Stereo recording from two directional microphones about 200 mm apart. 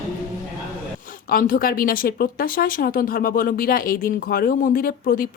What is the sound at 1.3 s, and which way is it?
Speech, 45° left (ahead or behind).